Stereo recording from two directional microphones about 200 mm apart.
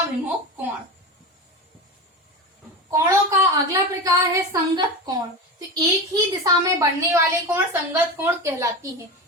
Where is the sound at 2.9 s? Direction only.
15° right (ahead or behind).